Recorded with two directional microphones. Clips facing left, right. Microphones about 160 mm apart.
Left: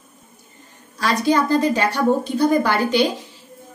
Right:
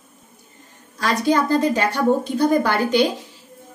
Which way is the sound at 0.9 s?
50° right (ahead or behind).